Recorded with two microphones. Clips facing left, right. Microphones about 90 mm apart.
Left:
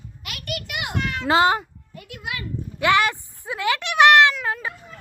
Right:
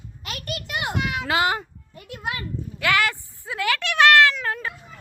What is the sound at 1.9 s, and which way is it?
Music, 35° right (ahead or behind).